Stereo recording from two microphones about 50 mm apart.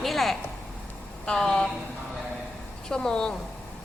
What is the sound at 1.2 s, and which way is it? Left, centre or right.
Speech, centre.